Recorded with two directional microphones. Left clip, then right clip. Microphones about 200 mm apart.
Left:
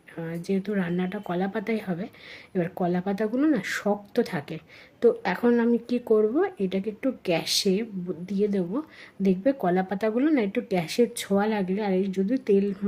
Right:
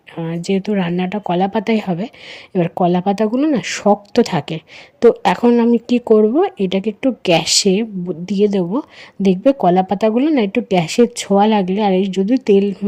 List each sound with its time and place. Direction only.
0.2 s speech: 35° right (ahead or behind)
5.5 s speech: 25° right (ahead or behind)